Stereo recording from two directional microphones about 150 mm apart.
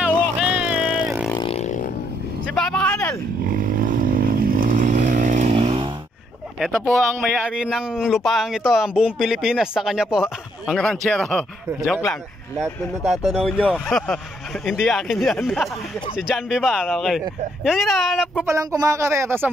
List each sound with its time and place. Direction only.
0.0 s vehicle: 10° right (ahead or behind)
1.5 s vehicle: 50° left (ahead or behind)
2.4 s vehicle: 5° left (ahead or behind)
3.4 s vehicle: 65° right (ahead or behind); by 5.9 s 45° right (ahead or behind)
7.4 s speech: 5° right (ahead or behind)
13.0 s speech: centre (ahead or behind)
18.4 s speech: 20° right (ahead or behind)